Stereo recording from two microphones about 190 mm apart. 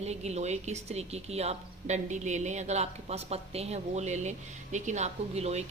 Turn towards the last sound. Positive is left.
turn(degrees=-35)  # may be behind; listen again after turning